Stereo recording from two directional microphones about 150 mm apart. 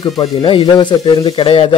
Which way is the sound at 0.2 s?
35° left (ahead or behind).